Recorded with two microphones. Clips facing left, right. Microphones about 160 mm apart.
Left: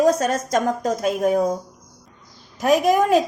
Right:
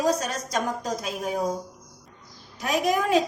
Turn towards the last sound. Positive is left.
turn(degrees=50)  # may be behind; listen again after turning